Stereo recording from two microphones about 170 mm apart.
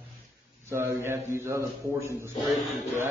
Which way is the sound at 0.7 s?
15° right (ahead or behind).